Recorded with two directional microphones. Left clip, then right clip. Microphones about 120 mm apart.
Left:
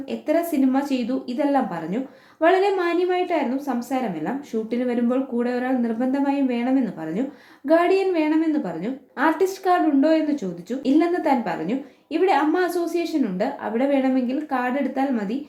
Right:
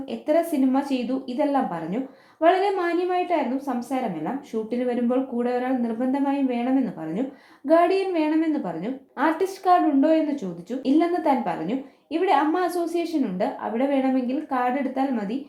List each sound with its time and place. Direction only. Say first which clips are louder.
0.3 s a woman's voice: even; 25° right (ahead or behind)
7.7 s a woman's voice: left 1 dB; 25° right (ahead or behind)